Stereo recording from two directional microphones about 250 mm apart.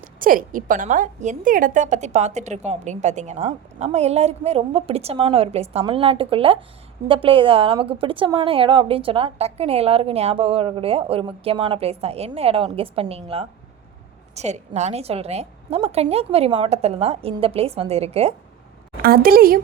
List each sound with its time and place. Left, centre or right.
0.0 s a woman's voice: right
19.0 s a woman's voice: right